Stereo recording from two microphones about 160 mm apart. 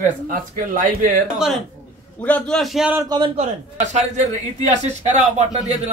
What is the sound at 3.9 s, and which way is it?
Speech, 45° right (ahead or behind).